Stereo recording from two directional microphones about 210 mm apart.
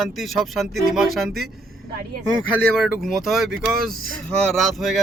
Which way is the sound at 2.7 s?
Centre (ahead or behind).